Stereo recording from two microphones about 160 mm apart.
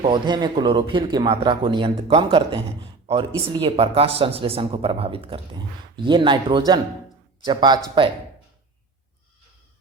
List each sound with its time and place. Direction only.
0.0 s speech: 30° right (ahead or behind)